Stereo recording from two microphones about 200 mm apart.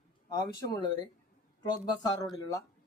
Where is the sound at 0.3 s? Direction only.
20° left (ahead or behind).